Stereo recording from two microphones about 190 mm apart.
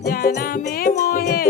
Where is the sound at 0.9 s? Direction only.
50° left (ahead or behind).